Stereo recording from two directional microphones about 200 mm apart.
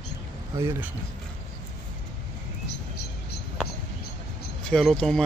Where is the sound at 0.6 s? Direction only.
10° right (ahead or behind).